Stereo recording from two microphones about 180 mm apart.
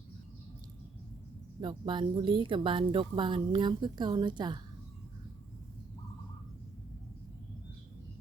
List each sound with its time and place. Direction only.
1.6 s a woman's voice: 25° right (ahead or behind)